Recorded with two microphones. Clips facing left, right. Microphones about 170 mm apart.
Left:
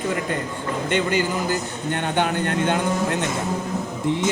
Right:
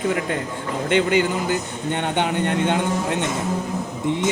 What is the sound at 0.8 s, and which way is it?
A man's voice, 20° right (ahead or behind).